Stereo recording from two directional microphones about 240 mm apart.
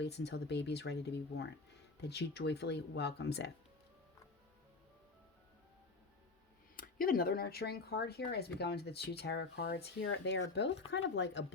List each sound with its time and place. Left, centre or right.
0.0 s speech: left
6.7 s speech: left